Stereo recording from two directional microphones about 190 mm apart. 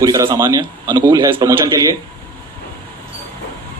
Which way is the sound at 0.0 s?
15° right (ahead or behind).